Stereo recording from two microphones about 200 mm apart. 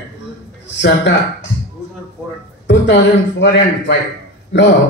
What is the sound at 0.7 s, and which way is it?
Speech, 60° left (ahead or behind).